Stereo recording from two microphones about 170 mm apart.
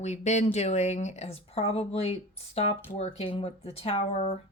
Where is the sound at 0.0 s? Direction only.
40° left (ahead or behind).